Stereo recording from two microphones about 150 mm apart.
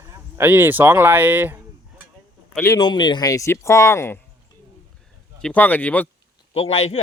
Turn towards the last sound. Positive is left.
turn(degrees=40)  # may be behind; listen again after turning